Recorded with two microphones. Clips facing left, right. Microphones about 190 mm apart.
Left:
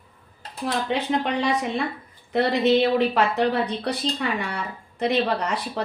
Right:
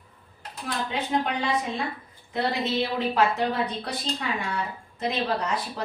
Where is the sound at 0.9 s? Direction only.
70° left (ahead or behind).